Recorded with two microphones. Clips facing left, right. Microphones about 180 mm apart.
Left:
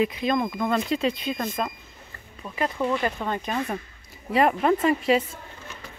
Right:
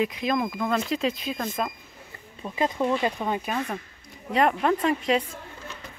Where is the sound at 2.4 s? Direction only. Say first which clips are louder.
Right 1 dB; 20° right (ahead or behind).